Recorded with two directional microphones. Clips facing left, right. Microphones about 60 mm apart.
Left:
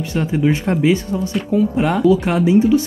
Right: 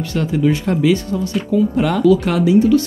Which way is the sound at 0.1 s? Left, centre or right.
Left.